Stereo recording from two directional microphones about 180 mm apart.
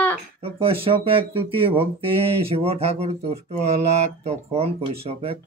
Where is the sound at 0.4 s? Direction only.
30° right (ahead or behind).